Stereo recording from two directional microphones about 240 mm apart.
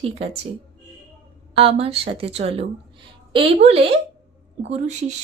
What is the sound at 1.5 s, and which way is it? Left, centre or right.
A woman's voice, right.